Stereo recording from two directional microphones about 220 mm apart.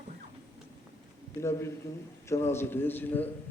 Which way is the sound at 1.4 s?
10° left (ahead or behind).